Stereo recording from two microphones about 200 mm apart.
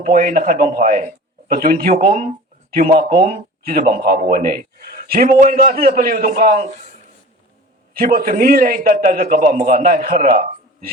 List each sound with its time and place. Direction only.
0.0 s speech: 45° right (ahead or behind)
7.9 s speech: 45° right (ahead or behind)